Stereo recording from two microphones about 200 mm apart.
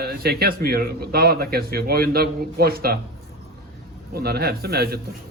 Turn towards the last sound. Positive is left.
turn(degrees=-50)  # may be behind; listen again after turning